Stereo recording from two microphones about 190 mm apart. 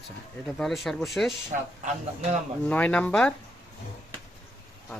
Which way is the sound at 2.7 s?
5° left (ahead or behind).